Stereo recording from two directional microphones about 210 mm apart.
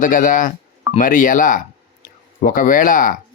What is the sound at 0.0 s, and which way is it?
Speech, 40° left (ahead or behind).